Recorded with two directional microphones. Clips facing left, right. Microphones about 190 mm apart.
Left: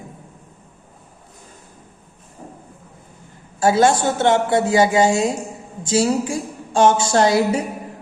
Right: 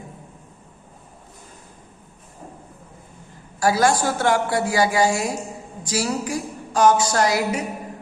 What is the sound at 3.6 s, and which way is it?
A woman's voice, 25° left (ahead or behind).